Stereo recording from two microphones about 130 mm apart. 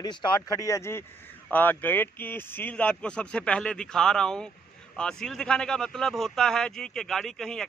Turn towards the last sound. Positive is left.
turn(degrees=5)  # may be behind; listen again after turning